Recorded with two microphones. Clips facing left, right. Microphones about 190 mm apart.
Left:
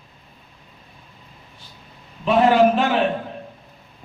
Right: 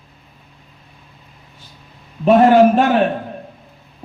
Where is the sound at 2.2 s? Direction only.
50° right (ahead or behind).